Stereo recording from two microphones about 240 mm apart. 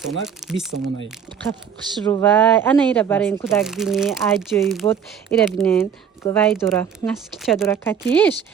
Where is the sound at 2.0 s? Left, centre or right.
Centre.